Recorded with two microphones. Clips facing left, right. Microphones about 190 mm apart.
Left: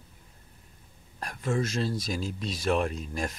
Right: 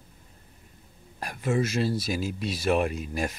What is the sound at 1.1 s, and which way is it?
Speech, 10° right (ahead or behind).